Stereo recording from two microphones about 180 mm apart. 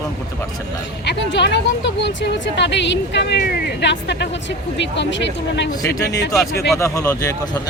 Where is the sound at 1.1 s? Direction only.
75° left (ahead or behind).